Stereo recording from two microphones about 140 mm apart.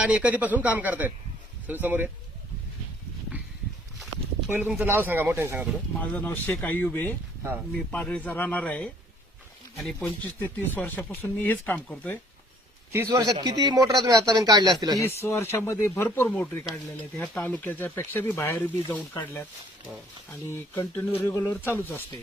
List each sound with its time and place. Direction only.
0.0 s speech: 10° right (ahead or behind)
4.8 s speech: 15° right (ahead or behind)
6.0 s speech: 15° left (ahead or behind)
10.0 s speech: 10° left (ahead or behind)
12.9 s a man's voice: 20° right (ahead or behind)
15.0 s speech: 20° left (ahead or behind)
20.5 s speech: 20° left (ahead or behind)